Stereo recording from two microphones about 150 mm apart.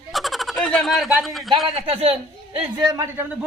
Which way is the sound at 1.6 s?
40° right (ahead or behind).